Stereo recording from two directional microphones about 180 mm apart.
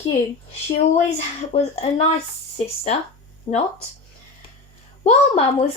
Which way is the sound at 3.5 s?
35° left (ahead or behind).